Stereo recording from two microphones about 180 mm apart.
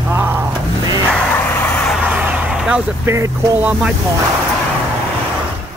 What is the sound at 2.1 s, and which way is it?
Speech, 10° right (ahead or behind).